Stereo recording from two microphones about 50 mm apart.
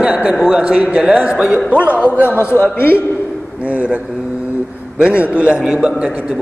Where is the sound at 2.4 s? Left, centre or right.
Left.